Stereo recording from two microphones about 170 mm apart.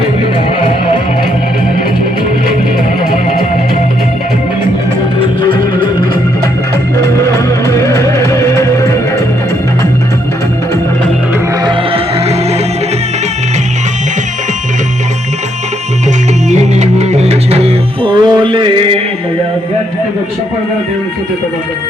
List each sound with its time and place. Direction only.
5.4 s music: 30° left (ahead or behind)
7.0 s music: 20° left (ahead or behind)
11.6 s music: 30° right (ahead or behind)
16.5 s music: 40° right (ahead or behind)